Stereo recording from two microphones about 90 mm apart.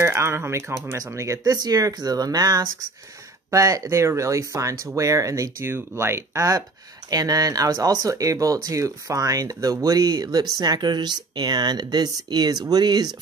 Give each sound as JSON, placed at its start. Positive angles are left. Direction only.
{"t": 0.0, "sound": "speech", "side_deg": -30}
{"t": 1.4, "sound": "speech", "side_deg": -50}